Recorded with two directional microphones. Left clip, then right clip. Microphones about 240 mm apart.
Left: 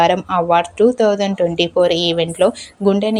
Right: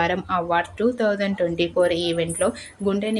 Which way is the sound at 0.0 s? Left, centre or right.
Left.